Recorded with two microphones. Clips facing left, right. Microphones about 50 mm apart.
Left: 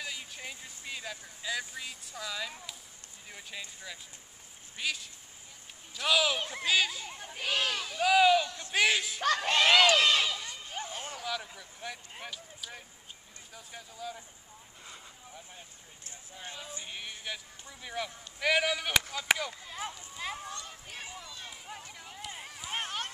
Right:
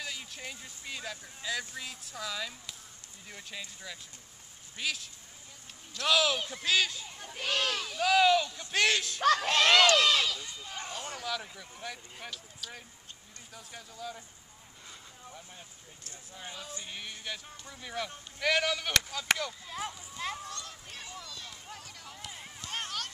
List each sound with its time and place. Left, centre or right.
0.0 s speech: centre
16.3 s speech: centre
20.4 s run: centre
22.3 s a sound: centre